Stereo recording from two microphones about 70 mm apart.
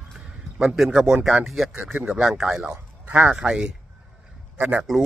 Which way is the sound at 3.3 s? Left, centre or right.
Centre.